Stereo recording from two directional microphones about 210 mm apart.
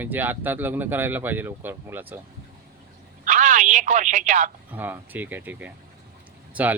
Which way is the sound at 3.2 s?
35° right (ahead or behind).